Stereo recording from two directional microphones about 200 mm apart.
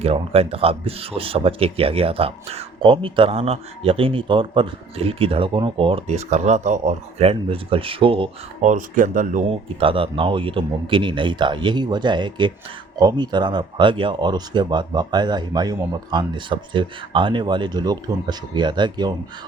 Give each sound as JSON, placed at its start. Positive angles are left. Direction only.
{"t": 0.0, "sound": "speech", "side_deg": -30}
{"t": 9.5, "sound": "speech", "side_deg": -25}